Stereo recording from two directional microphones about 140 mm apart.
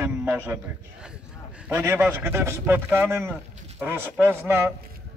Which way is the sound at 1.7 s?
15° right (ahead or behind).